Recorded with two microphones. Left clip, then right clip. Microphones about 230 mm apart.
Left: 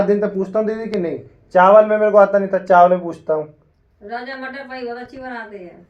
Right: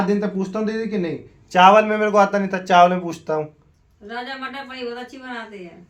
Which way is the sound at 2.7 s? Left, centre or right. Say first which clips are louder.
Left 2 dB; right.